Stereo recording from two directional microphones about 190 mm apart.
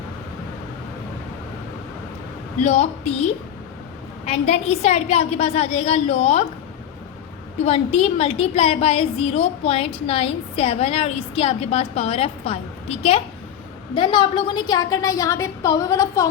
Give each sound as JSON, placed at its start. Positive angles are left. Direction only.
{"t": 2.6, "sound": "a woman's voice", "side_deg": 35}
{"t": 4.3, "sound": "a woman's voice", "side_deg": 35}
{"t": 7.6, "sound": "a woman's voice", "side_deg": 35}